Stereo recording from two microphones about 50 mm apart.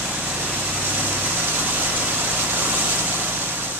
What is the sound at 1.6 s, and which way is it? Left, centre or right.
Vehicle, right.